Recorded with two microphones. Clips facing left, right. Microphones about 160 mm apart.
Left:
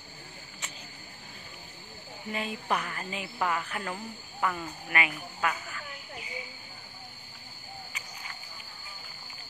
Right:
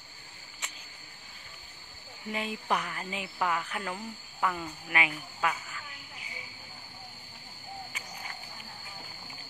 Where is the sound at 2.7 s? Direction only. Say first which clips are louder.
Even; 15° right (ahead or behind).